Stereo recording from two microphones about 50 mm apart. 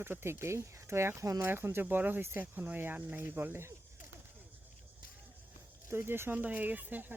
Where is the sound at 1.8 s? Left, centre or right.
Right.